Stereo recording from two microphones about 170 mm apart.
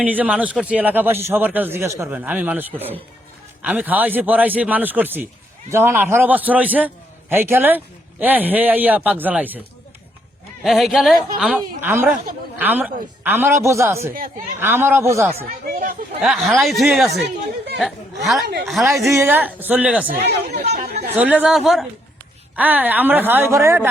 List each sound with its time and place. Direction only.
0.0 s a man's voice: 10° right (ahead or behind)
10.6 s a man's voice: centre (ahead or behind)
15.7 s speech: 55° right (ahead or behind)
16.2 s speech: centre (ahead or behind)
17.2 s speech: 75° right (ahead or behind)
18.6 s speech: centre (ahead or behind)
18.9 s a man's voice: 20° right (ahead or behind)
20.2 s speech: 70° right (ahead or behind)
21.2 s a man's voice: 10° right (ahead or behind)